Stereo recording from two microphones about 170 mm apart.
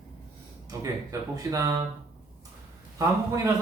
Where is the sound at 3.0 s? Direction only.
20° right (ahead or behind).